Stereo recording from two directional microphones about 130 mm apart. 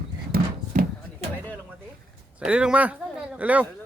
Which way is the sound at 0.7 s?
75° right (ahead or behind).